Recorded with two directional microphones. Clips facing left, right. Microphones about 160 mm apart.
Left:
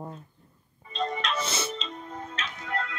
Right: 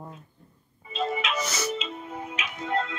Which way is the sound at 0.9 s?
5° right (ahead or behind).